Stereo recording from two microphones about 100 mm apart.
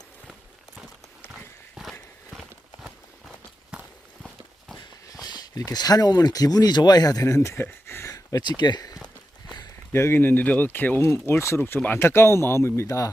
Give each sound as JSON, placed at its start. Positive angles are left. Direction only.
{"t": 1.7, "sound": "horse", "side_deg": 0}
{"t": 5.2, "sound": "speech", "side_deg": 40}
{"t": 8.1, "sound": "speech", "side_deg": 45}
{"t": 9.9, "sound": "speech", "side_deg": 25}